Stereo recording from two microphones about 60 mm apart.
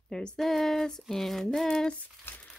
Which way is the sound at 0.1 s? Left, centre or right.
Centre.